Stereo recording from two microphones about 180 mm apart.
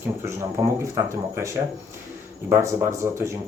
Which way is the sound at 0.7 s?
15° right (ahead or behind).